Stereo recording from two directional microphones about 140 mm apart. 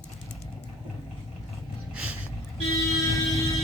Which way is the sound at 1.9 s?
10° right (ahead or behind).